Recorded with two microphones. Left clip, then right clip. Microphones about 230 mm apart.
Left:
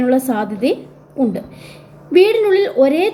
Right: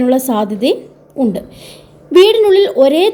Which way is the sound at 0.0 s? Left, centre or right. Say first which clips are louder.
Right 3 dB; right.